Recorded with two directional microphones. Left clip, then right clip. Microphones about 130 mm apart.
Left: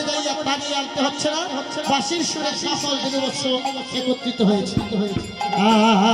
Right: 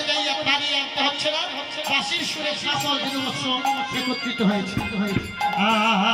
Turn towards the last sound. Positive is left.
turn(degrees=40)  # may be behind; listen again after turning